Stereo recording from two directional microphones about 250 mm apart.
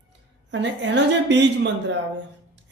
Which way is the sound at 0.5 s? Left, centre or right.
Right.